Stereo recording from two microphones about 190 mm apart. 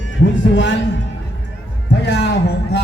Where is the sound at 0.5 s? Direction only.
70° left (ahead or behind).